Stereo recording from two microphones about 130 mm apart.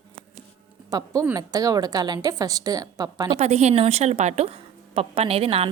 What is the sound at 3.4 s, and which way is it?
A woman's voice, 60° right (ahead or behind).